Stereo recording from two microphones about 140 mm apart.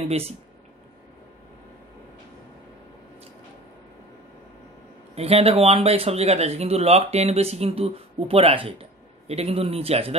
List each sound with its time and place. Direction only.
0.0 s speech: 45° right (ahead or behind)
5.1 s speech: 45° right (ahead or behind)